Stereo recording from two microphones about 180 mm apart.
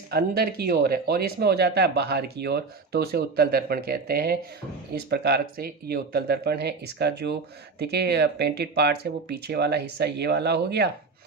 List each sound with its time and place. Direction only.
0.1 s speech: 60° right (ahead or behind)